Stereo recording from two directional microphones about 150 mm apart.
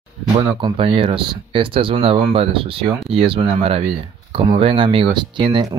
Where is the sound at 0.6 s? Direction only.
35° right (ahead or behind).